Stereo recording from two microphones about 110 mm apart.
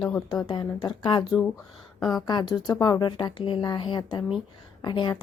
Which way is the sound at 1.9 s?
Centre (ahead or behind).